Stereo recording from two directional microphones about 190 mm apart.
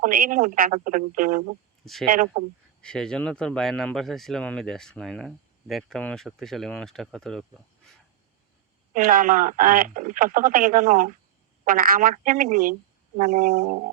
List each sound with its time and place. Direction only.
0.0 s speech: 45° right (ahead or behind)
1.8 s speech: centre (ahead or behind)
2.0 s speech: 50° right (ahead or behind)
2.8 s speech: 5° left (ahead or behind)
8.9 s speech: 45° right (ahead or behind)